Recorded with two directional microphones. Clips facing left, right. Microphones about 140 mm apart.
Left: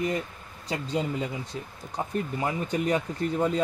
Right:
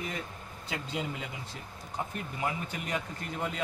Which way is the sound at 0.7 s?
35° left (ahead or behind).